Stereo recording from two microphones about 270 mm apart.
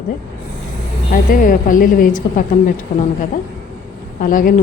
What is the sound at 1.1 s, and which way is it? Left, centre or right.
A woman's voice, left.